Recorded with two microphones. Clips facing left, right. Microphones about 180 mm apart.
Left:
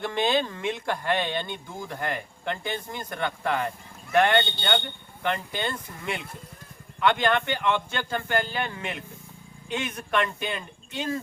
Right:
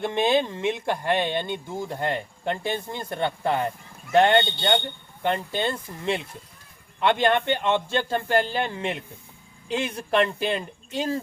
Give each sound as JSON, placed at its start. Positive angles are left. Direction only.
{"t": 0.0, "sound": "speech", "side_deg": -20}